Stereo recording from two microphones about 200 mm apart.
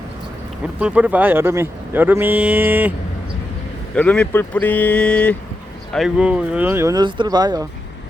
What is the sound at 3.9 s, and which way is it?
Speech, 5° left (ahead or behind).